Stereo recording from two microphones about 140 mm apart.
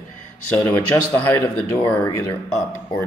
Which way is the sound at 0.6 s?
15° left (ahead or behind).